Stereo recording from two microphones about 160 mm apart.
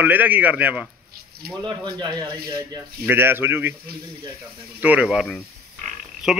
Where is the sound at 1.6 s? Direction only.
25° right (ahead or behind).